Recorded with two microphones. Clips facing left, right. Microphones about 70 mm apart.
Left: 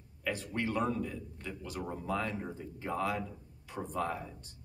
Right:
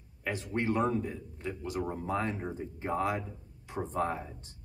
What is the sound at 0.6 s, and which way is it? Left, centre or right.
A man's voice, right.